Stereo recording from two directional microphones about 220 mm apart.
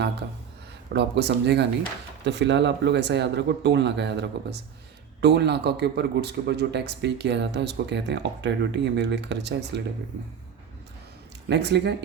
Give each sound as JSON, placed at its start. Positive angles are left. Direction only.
{"t": 0.9, "sound": "speech", "side_deg": -50}
{"t": 11.4, "sound": "speech", "side_deg": -50}